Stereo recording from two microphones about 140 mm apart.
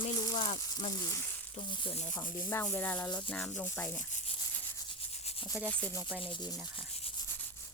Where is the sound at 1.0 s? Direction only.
20° left (ahead or behind).